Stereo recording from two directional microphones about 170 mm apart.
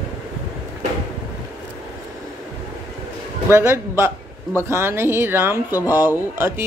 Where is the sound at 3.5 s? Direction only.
15° right (ahead or behind).